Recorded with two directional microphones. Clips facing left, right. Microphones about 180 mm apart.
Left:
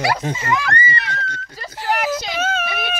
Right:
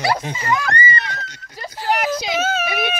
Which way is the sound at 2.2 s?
10° right (ahead or behind).